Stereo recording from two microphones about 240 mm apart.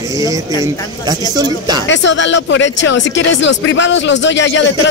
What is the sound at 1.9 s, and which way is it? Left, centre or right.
Speech, left.